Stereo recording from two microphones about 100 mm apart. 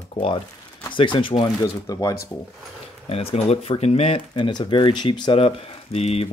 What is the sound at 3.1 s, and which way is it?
Speech, 75° left (ahead or behind).